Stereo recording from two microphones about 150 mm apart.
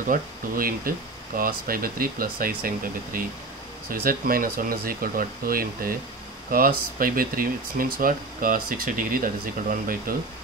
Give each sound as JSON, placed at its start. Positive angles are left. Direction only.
{"t": 0.0, "sound": "speech", "side_deg": -70}
{"t": 7.0, "sound": "speech", "side_deg": -70}